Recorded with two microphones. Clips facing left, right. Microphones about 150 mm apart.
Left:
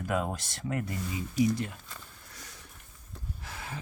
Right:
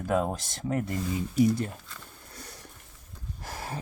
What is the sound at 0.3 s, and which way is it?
Speech, 45° right (ahead or behind).